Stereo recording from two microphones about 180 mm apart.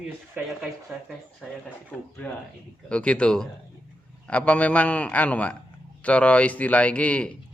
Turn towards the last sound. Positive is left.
turn(degrees=5)  # may be behind; listen again after turning